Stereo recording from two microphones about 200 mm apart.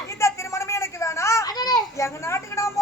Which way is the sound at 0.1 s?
15° left (ahead or behind).